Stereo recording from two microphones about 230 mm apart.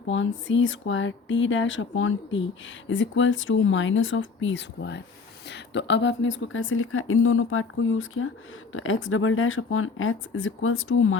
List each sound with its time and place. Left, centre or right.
0.4 s speech: left